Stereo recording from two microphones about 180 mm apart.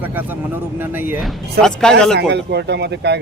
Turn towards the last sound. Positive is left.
turn(degrees=-65)  # may be behind; listen again after turning